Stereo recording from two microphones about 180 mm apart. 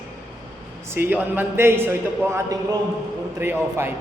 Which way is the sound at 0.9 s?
10° right (ahead or behind).